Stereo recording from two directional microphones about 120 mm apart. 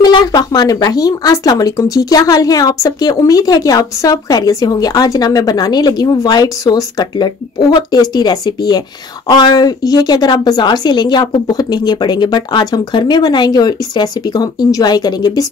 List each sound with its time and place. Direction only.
0.0 s speech: 35° left (ahead or behind)